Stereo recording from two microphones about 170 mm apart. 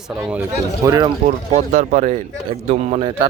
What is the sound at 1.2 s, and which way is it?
A man's voice, 45° right (ahead or behind).